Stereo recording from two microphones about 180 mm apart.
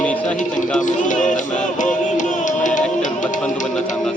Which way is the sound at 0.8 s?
45° left (ahead or behind).